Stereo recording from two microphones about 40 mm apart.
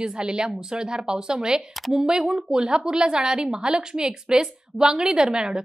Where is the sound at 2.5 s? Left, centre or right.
Right.